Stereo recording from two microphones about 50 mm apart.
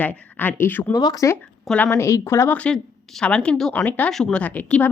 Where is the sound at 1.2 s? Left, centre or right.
Left.